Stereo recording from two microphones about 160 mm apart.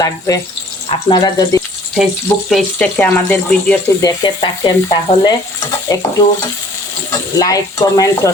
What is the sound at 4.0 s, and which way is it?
Stir, 25° left (ahead or behind).